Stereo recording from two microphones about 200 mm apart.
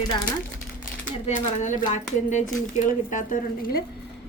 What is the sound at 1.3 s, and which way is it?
Speech, 35° left (ahead or behind).